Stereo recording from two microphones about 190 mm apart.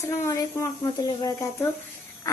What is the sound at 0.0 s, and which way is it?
A child's voice, 15° left (ahead or behind).